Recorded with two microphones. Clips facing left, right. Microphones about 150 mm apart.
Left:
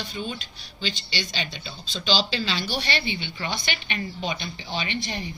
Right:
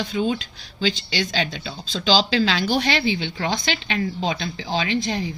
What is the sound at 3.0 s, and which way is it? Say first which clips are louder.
A woman's voice: right 7 dB; 90° right.